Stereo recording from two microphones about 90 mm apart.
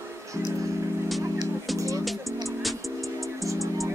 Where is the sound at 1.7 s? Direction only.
35° right (ahead or behind).